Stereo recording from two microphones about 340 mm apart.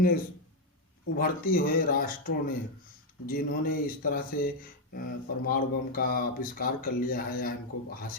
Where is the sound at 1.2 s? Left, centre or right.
Left.